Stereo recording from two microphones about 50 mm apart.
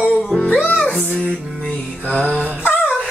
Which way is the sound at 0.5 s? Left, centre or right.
Left.